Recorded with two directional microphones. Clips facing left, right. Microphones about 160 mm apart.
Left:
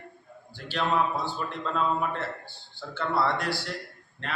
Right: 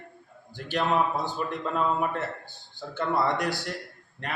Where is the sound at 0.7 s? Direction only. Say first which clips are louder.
Right 1 dB; 15° right (ahead or behind).